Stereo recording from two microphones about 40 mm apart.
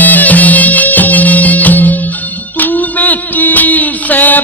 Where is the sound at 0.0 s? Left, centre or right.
Left.